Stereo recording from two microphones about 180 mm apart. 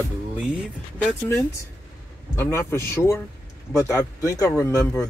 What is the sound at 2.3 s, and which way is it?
Speech, 15° left (ahead or behind).